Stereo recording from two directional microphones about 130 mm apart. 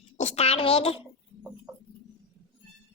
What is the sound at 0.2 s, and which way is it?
Speech, 55° left (ahead or behind).